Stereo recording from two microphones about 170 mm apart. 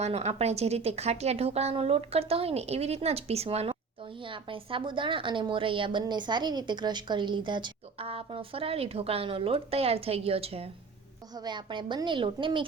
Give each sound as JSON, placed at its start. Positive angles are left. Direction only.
{"t": 0.0, "sound": "a woman's voice", "side_deg": -40}